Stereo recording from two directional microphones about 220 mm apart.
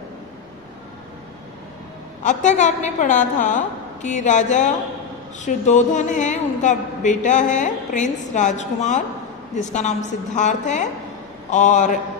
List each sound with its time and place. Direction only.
2.2 s a man's voice: 35° left (ahead or behind)